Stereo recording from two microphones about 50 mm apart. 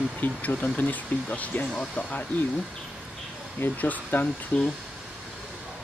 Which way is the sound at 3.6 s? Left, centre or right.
Left.